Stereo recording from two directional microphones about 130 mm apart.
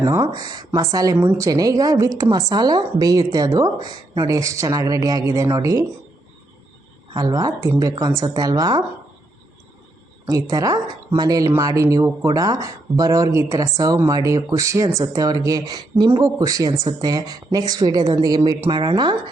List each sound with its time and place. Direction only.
0.3 s speech: 30° right (ahead or behind)
7.3 s speech: 25° right (ahead or behind)
10.5 s speech: 30° right (ahead or behind)
16.0 s speech: 20° right (ahead or behind); by 19.1 s 35° right (ahead or behind)